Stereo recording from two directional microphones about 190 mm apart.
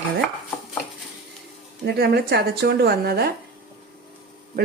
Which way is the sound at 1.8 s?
55° right (ahead or behind).